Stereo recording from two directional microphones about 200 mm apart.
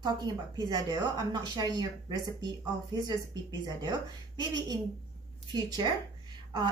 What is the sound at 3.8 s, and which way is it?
A woman's voice, 20° right (ahead or behind).